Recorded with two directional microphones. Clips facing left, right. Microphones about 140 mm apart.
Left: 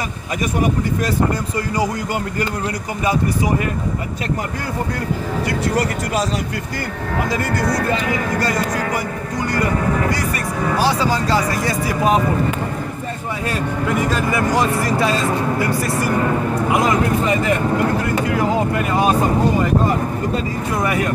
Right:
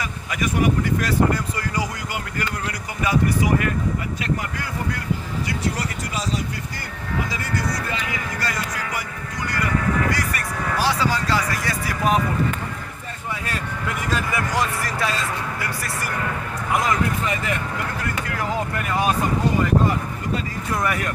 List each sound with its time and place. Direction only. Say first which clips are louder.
7.2 s speech: left 6 dB; 55° left (ahead or behind)
7.9 s speech: left 9 dB; 40° left (ahead or behind)
13.8 s speech: left 6 dB; 25° left (ahead or behind)
16.6 s speech: left 3 dB; 20° left (ahead or behind); by 17.9 s 35° left (ahead or behind)
18.2 s speech: left 6 dB; 20° left (ahead or behind)
20.8 s speech: left 5 dB; 20° left (ahead or behind)